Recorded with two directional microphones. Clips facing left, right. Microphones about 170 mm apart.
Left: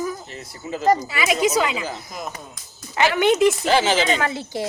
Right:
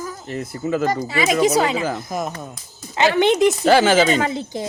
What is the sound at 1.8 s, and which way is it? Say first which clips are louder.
Speech: right 7 dB; 50° right (ahead or behind).